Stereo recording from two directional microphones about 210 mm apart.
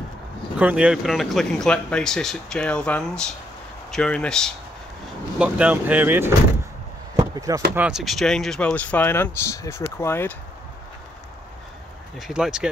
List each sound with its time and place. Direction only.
0.6 s speech: 5° right (ahead or behind)
5.4 s speech: 5° right (ahead or behind)
7.2 s a sound: 15° right (ahead or behind)
7.7 s speech: 5° right (ahead or behind); by 10.3 s 10° left (ahead or behind)
12.2 s speech: centre (ahead or behind)